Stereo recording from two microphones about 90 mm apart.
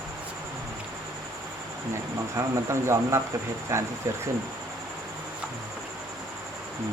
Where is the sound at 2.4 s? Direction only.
30° right (ahead or behind).